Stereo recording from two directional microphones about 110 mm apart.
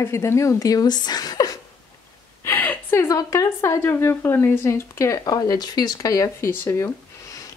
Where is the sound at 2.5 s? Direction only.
20° left (ahead or behind).